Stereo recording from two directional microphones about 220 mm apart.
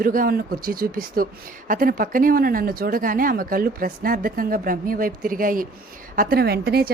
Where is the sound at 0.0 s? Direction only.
40° right (ahead or behind).